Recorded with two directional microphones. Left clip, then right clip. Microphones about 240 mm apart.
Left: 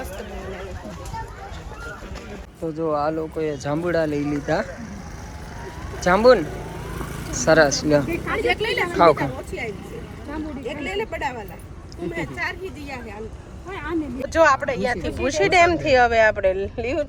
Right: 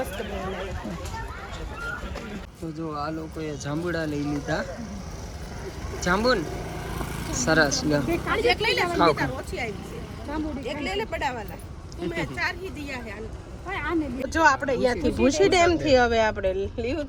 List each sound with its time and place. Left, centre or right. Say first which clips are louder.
2.7 s speech: left 9 dB; centre
6.0 s speech: left 8 dB; centre
14.3 s speech: left 4 dB; centre